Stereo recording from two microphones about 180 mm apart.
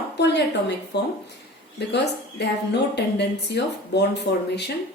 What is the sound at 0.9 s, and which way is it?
Speech, 70° left (ahead or behind).